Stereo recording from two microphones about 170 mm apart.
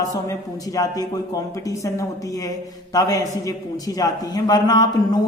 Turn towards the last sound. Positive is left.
turn(degrees=25)  # may be behind; listen again after turning